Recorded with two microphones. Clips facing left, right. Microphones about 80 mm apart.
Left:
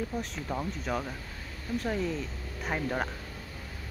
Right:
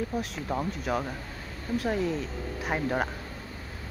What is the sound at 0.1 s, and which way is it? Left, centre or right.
Speech, centre.